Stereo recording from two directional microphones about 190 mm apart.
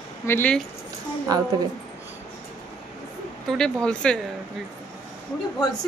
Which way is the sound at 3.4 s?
5° left (ahead or behind).